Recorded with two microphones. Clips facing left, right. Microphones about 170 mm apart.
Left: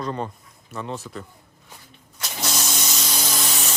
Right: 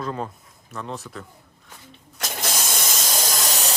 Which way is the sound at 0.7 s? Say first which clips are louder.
Left 2 dB; centre (ahead or behind).